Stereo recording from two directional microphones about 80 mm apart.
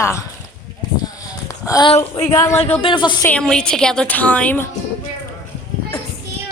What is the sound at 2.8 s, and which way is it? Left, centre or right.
Speech, left.